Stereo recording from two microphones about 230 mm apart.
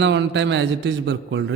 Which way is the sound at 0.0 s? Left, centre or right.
Right.